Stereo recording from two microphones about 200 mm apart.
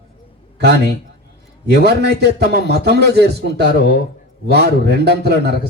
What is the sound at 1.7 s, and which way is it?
A man's voice, 55° right (ahead or behind).